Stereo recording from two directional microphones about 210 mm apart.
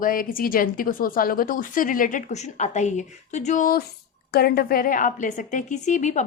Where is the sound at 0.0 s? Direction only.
40° left (ahead or behind).